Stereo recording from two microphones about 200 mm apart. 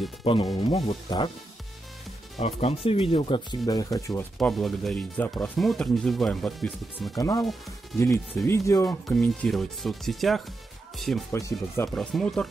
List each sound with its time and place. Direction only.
0.2 s speech: 25° left (ahead or behind)
2.3 s speech: 30° left (ahead or behind); by 4.3 s 15° left (ahead or behind)
4.4 s speech: centre (ahead or behind)
7.2 s speech: 20° left (ahead or behind)
8.5 s speech: 15° left (ahead or behind)
9.2 s speech: 5° left (ahead or behind)
11.3 s speech: 15° left (ahead or behind)
12.0 s speech: centre (ahead or behind)